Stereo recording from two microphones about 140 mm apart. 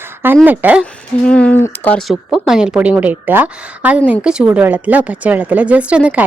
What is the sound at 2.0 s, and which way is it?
Speech, centre (ahead or behind).